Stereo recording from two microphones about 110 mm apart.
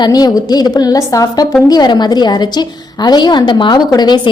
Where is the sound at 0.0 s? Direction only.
35° left (ahead or behind).